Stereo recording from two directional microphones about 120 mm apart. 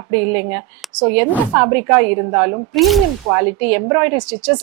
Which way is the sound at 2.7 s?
Centre (ahead or behind).